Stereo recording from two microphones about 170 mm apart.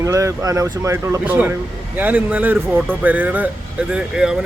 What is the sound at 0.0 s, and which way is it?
Speech, 20° right (ahead or behind).